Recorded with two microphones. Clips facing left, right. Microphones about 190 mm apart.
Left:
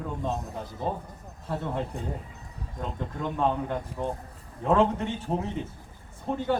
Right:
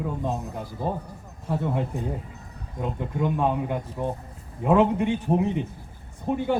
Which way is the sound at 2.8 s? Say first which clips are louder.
Right 6 dB; 10° right (ahead or behind).